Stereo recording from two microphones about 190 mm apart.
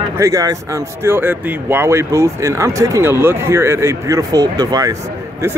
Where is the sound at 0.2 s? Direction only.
15° right (ahead or behind).